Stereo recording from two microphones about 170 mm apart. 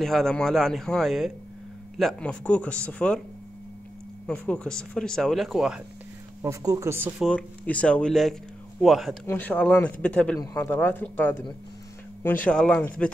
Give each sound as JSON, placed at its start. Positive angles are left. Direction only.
{"t": 0.0, "sound": "speech", "side_deg": 0}
{"t": 4.3, "sound": "speech", "side_deg": 5}
{"t": 6.4, "sound": "speech", "side_deg": -20}
{"t": 7.2, "sound": "speech", "side_deg": 5}
{"t": 9.2, "sound": "speech", "side_deg": 10}